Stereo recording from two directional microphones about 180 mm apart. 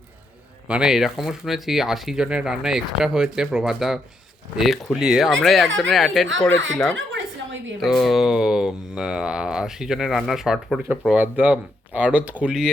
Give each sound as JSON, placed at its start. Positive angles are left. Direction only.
{"t": 0.7, "sound": "speech", "side_deg": -5}
{"t": 6.9, "sound": "a sound", "side_deg": -90}
{"t": 7.8, "sound": "speech", "side_deg": 0}